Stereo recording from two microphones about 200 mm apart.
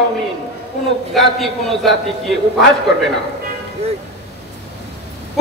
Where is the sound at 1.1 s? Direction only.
Centre (ahead or behind).